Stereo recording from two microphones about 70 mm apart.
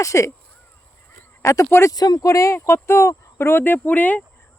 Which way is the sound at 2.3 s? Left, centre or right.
Left.